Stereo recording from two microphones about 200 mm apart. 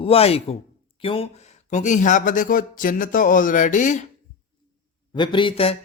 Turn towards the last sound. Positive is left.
turn(degrees=30)  # may be behind; listen again after turning